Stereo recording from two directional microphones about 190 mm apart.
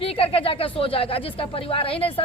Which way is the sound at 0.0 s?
30° left (ahead or behind).